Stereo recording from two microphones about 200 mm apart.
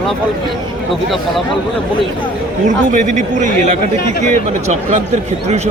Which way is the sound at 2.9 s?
40° right (ahead or behind).